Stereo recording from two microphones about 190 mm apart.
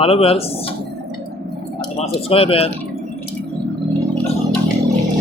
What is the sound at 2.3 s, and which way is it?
Speech, 30° left (ahead or behind).